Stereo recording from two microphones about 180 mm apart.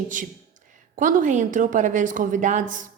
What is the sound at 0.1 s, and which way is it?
A woman's voice, 45° right (ahead or behind).